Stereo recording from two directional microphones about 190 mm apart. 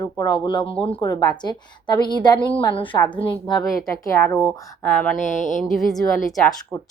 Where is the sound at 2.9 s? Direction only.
20° left (ahead or behind).